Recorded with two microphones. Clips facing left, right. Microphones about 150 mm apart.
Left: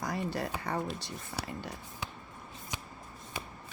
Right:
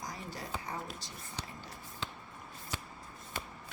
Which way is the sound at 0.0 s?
65° left (ahead or behind).